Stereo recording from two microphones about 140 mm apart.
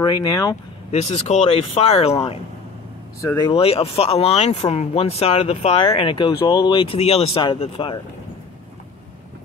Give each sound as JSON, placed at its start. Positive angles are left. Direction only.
{"t": 0.0, "sound": "speech", "side_deg": 25}
{"t": 1.1, "sound": "speech", "side_deg": 50}
{"t": 3.4, "sound": "speech", "side_deg": 45}